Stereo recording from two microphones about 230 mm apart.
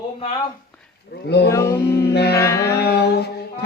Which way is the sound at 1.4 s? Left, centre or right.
Centre.